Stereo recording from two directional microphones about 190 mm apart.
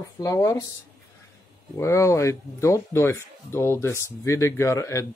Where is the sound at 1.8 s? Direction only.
15° left (ahead or behind).